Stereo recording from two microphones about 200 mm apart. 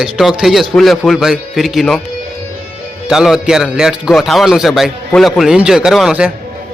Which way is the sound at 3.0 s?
Centre (ahead or behind).